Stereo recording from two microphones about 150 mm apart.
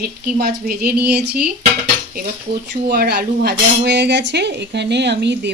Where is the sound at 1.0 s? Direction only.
90° right.